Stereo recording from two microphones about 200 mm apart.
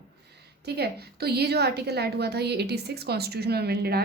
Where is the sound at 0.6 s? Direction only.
55° right (ahead or behind).